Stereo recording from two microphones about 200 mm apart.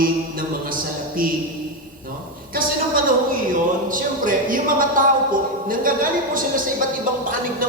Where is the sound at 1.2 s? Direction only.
45° right (ahead or behind).